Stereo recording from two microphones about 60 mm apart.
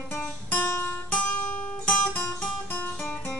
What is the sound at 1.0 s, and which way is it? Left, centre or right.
Music, left.